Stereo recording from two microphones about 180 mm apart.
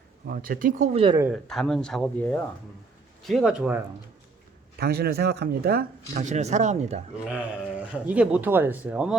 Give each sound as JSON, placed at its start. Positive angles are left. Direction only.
{"t": 0.3, "sound": "speech", "side_deg": -50}
{"t": 1.3, "sound": "speech", "side_deg": 0}
{"t": 4.8, "sound": "speech", "side_deg": -60}
{"t": 6.1, "sound": "speech", "side_deg": -40}
{"t": 7.3, "sound": "speech", "side_deg": -5}